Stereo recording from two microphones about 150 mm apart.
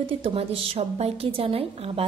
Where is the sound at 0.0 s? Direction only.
40° right (ahead or behind).